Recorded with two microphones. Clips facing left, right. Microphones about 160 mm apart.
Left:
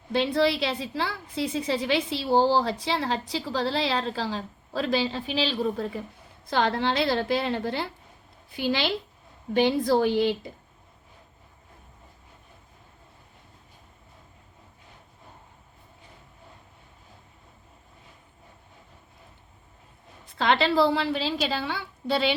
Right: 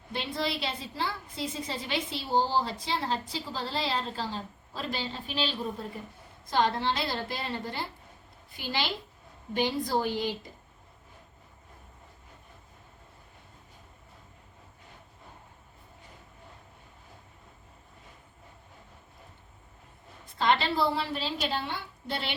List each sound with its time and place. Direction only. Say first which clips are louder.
0.1 s a woman's voice: left 9 dB; 90° left
8.5 s a woman's voice: left 7 dB; 90° left
20.4 s a woman's voice: left 4 dB; 90° left